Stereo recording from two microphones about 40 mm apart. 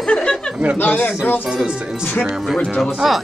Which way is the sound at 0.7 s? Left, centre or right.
Left.